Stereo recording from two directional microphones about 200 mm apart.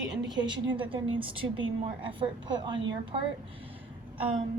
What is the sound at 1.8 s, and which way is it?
Speech, 25° right (ahead or behind).